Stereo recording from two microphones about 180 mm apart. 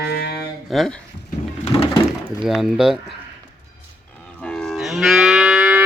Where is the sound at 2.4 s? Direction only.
Centre (ahead or behind).